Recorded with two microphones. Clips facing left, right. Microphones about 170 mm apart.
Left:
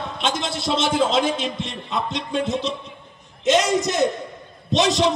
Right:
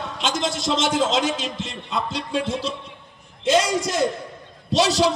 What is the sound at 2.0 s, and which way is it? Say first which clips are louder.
A man's voice: left 2 dB; 5° right (ahead or behind).